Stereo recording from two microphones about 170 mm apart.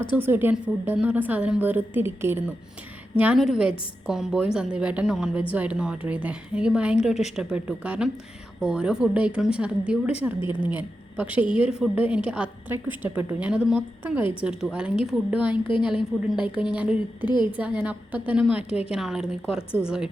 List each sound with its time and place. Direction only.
0.2 s a woman's voice: 10° right (ahead or behind)
17.2 s a woman's voice: 25° left (ahead or behind)
17.6 s a woman's voice: 5° right (ahead or behind)